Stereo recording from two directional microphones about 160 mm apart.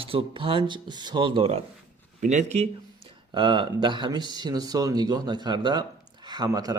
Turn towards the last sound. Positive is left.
turn(degrees=-25)  # may be behind; listen again after turning